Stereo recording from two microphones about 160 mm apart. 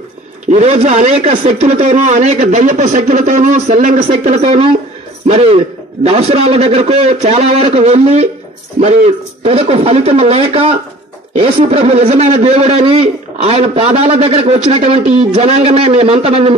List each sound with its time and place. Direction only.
0.5 s a man's voice: 45° right (ahead or behind)